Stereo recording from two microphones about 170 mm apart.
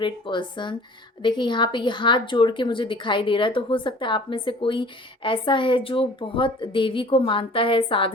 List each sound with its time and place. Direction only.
0.0 s speech: 30° left (ahead or behind)